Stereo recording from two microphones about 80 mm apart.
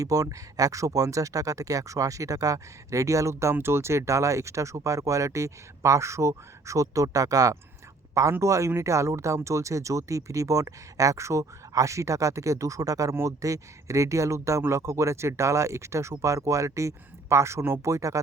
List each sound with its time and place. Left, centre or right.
0.0 s speech: right